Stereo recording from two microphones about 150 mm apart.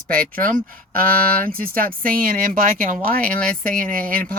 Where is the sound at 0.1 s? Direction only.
70° right (ahead or behind).